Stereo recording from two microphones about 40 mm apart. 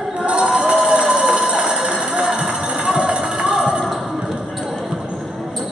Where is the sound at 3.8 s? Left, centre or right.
Centre.